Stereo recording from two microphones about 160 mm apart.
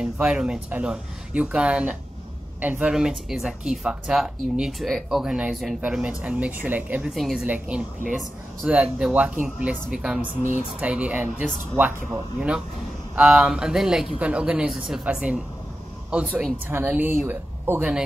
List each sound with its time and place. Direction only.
0.0 s speech: 5° right (ahead or behind)
10.2 s speech: 55° right (ahead or behind)
10.8 s speech: 10° right (ahead or behind)